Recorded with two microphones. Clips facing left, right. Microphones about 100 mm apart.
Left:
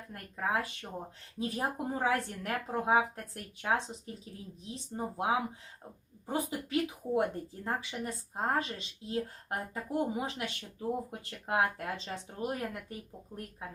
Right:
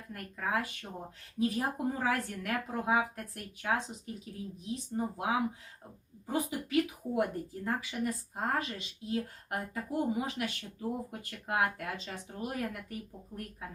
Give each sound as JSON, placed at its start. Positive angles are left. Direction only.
{"t": 0.1, "sound": "speech", "side_deg": 30}